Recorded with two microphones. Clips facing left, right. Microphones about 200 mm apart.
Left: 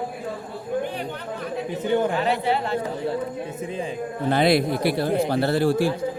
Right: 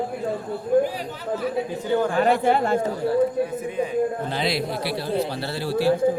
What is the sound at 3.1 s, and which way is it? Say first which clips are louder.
Speech: right 7 dB; 25° left (ahead or behind).